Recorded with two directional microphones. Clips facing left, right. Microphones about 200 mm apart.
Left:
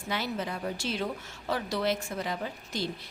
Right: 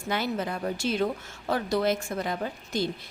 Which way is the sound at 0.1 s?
50° right (ahead or behind).